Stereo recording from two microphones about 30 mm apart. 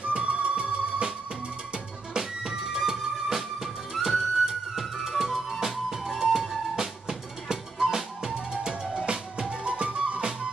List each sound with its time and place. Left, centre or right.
0.0 s music: right
2.1 s music: centre
9.7 s music: right